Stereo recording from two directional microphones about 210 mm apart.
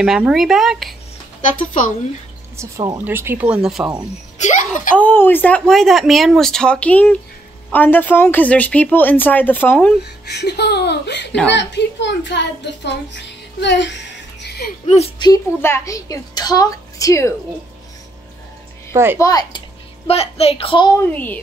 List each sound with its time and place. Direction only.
0.0 s speech: 5° right (ahead or behind)
1.4 s speech: 40° left (ahead or behind)
2.5 s speech: 15° right (ahead or behind)
4.4 s a sound: 35° left (ahead or behind)
4.9 s speech: 10° left (ahead or behind)
10.2 s a child's voice: 50° left (ahead or behind)
14.4 s a sound: 50° left (ahead or behind)
15.1 s speech: 15° left (ahead or behind)
19.1 s speech: 15° left (ahead or behind)
20.1 s a woman's voice: 30° left (ahead or behind)
21.0 s speech: 10° left (ahead or behind)